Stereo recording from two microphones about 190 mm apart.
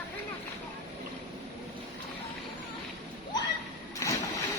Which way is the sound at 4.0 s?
15° left (ahead or behind).